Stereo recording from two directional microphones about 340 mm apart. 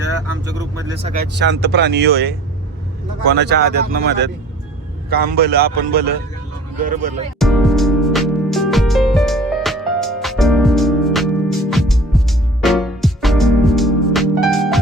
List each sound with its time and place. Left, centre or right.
1.1 s speech: right
7.3 s music: centre